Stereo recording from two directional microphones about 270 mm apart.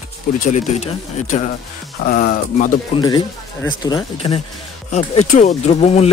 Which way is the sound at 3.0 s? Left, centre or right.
Centre.